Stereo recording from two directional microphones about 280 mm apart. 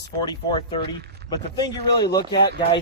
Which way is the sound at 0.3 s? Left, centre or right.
Centre.